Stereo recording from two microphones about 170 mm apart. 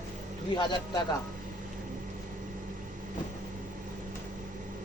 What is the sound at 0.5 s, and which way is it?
Speech, 25° left (ahead or behind).